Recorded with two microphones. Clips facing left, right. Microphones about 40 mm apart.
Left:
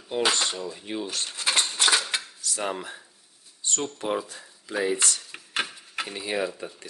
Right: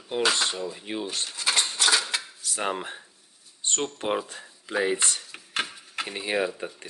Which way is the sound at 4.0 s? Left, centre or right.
Right.